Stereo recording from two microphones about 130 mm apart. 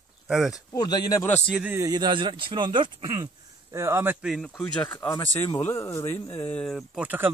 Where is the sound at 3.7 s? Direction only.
20° right (ahead or behind).